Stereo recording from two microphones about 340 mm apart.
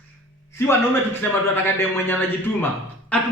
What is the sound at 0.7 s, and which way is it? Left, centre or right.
A man's voice, centre.